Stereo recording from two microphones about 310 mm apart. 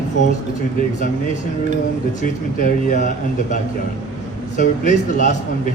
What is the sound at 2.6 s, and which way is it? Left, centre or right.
Speech, left.